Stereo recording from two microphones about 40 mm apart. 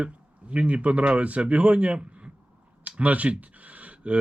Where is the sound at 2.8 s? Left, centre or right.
Right.